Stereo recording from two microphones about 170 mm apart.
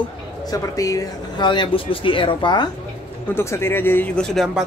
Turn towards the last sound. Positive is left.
turn(degrees=5)  # may be behind; listen again after turning